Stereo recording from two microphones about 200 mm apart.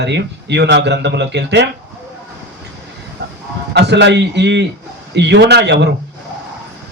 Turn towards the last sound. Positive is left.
turn(degrees=-60)  # may be behind; listen again after turning